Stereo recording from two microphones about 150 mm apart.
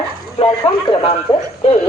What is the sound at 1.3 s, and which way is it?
Music, 35° left (ahead or behind).